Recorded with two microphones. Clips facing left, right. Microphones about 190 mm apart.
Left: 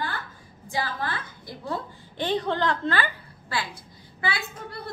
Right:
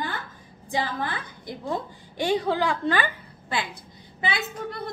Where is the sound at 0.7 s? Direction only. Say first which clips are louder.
Right 2 dB; 20° right (ahead or behind).